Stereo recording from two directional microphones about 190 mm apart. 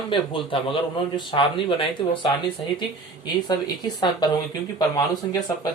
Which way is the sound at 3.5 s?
20° left (ahead or behind).